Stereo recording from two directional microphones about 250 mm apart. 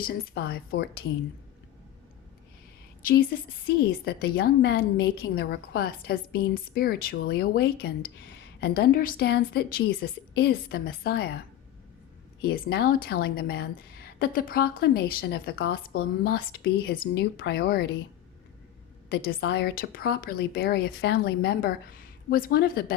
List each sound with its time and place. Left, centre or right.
0.0 s a woman's voice: left
3.0 s a woman's voice: left
12.4 s a woman's voice: left
19.0 s a woman's voice: left